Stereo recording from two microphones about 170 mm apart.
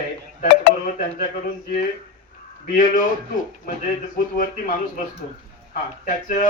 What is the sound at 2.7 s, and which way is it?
Speech, 50° left (ahead or behind).